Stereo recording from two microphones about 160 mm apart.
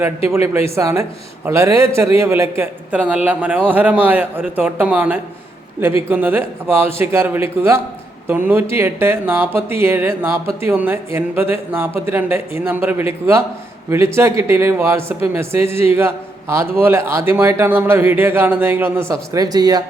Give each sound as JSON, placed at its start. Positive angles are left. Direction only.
{"t": 0.3, "sound": "speech", "side_deg": -15}
{"t": 14.2, "sound": "speech", "side_deg": -15}